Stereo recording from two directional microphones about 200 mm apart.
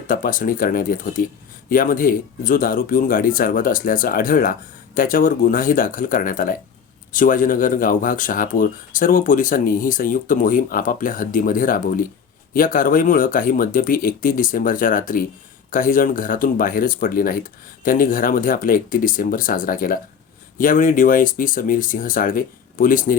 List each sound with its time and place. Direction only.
0.1 s speech: 45° left (ahead or behind)